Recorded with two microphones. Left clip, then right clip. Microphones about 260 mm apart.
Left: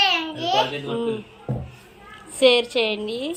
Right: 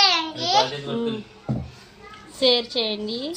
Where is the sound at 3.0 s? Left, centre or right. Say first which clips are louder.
Left 2 dB; left.